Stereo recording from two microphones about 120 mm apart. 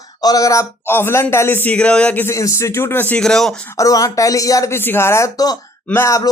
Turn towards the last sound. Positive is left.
turn(degrees=25)  # may be behind; listen again after turning